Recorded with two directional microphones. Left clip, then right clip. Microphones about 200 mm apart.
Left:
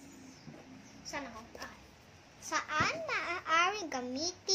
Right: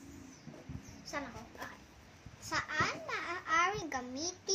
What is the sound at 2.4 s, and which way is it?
A child's voice, 15° left (ahead or behind).